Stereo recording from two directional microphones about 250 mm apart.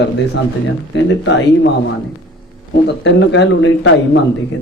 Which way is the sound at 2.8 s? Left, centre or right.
Left.